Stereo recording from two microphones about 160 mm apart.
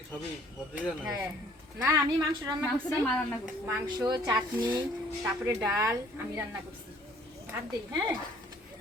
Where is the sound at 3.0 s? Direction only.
5° left (ahead or behind).